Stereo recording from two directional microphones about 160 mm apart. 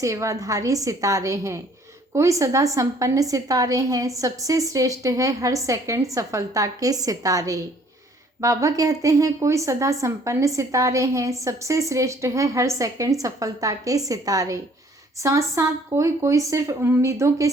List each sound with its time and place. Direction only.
0.0 s speech: 20° right (ahead or behind)